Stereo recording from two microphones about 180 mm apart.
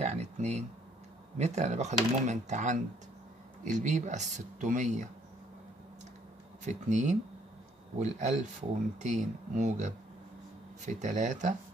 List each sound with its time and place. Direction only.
0.0 s a sound: 35° right (ahead or behind)
1.4 s speech: 40° right (ahead or behind)
6.6 s speech: 40° right (ahead or behind)